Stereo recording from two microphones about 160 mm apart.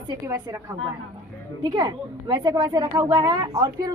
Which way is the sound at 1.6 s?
25° right (ahead or behind).